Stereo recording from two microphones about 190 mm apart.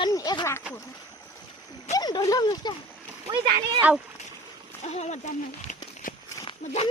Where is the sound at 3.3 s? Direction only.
25° right (ahead or behind).